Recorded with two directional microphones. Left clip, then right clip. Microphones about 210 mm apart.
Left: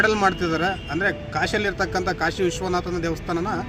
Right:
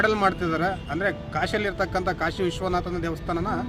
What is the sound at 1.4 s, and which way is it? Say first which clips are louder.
Speech: left 3 dB; 15° right (ahead or behind).